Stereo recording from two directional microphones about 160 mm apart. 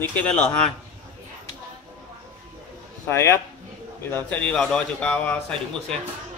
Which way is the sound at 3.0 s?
15° left (ahead or behind).